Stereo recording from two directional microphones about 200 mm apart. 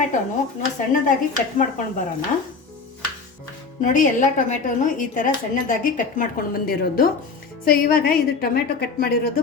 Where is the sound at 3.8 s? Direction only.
40° left (ahead or behind).